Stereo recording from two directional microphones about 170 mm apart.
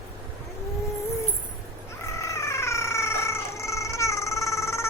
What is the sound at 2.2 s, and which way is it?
Cat, 15° left (ahead or behind).